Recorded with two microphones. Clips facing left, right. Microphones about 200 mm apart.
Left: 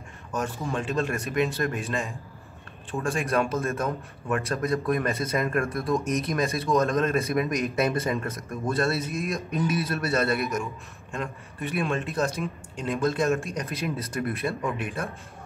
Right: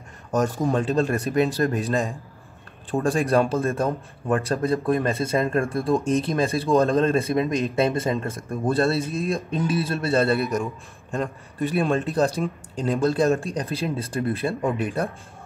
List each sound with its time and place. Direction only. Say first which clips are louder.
0.3 s speech: right 8 dB; 40° right (ahead or behind)